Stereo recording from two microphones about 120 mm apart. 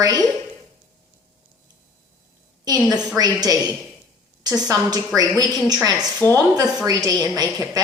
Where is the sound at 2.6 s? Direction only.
30° right (ahead or behind).